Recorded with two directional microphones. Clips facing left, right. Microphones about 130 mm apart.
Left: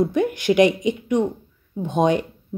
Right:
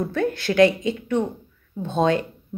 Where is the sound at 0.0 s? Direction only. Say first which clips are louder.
Left 4 dB; 15° left (ahead or behind).